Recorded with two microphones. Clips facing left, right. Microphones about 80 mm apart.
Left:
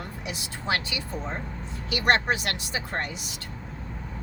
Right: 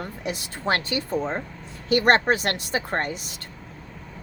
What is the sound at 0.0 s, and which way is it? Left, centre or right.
A woman's voice, right.